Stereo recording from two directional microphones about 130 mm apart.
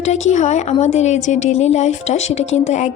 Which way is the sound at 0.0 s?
60° left (ahead or behind).